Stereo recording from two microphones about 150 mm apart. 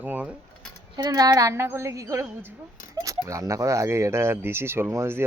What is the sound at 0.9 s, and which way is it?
A woman's voice, 25° right (ahead or behind).